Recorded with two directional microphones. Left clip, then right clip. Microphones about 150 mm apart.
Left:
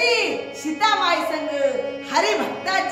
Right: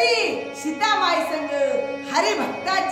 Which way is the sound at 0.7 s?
10° left (ahead or behind).